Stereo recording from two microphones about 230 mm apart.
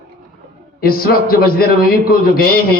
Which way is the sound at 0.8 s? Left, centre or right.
Left.